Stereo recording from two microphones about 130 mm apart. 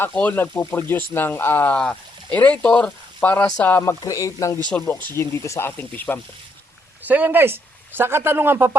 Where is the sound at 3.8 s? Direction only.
25° left (ahead or behind).